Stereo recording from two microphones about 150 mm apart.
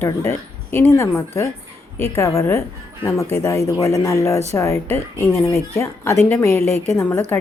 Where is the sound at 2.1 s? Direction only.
20° left (ahead or behind).